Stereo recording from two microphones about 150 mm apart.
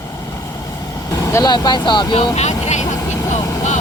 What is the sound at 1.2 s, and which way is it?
Speech, 25° left (ahead or behind).